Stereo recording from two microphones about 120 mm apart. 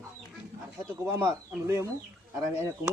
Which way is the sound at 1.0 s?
25° right (ahead or behind).